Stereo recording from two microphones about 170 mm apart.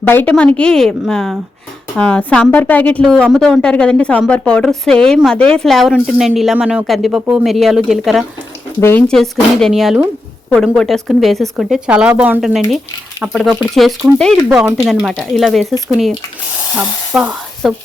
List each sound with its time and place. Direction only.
0.0 s a woman's voice: 10° left (ahead or behind)
8.8 s a woman's voice: 10° left (ahead or behind)